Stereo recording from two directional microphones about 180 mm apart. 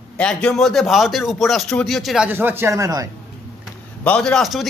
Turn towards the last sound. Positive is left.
turn(degrees=0)  # may be behind; listen again after turning